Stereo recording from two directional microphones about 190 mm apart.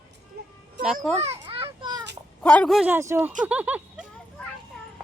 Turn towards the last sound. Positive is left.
turn(degrees=-5)  # may be behind; listen again after turning